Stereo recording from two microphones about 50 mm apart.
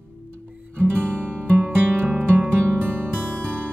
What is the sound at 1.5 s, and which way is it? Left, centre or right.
Music, right.